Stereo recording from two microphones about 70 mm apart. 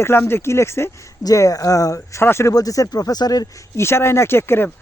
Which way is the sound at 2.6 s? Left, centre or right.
Left.